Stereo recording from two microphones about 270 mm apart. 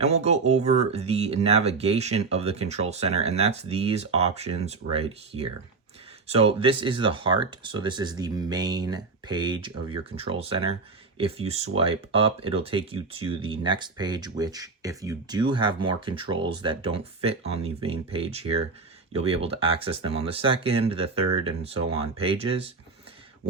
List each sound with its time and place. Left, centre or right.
0.0 s speech: right